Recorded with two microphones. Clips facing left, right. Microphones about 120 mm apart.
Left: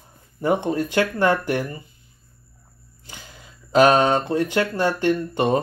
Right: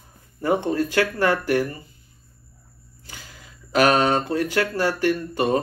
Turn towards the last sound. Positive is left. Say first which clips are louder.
# left 1 dB
turn(degrees=20)  # may be behind; listen again after turning